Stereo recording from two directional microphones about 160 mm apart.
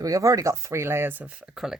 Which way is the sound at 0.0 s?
20° right (ahead or behind).